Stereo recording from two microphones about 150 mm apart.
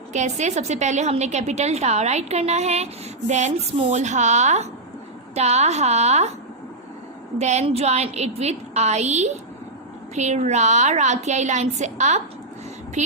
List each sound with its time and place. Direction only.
0.1 s a woman's voice: 50° right (ahead or behind)
7.3 s a woman's voice: 45° right (ahead or behind)